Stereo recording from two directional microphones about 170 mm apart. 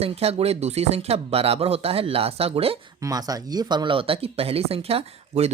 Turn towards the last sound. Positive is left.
turn(degrees=-35)  # may be behind; listen again after turning